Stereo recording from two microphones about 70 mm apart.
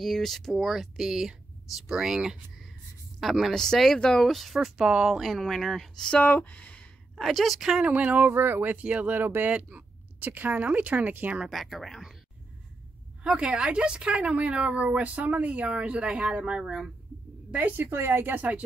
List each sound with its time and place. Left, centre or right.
0.0 s a woman's voice: centre
6.2 s speech: left
7.2 s speech: centre
7.8 s speech: right
11.4 s speech: centre
13.2 s speech: centre
17.5 s speech: right